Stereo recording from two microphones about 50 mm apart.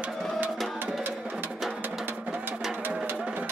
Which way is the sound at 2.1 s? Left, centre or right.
Right.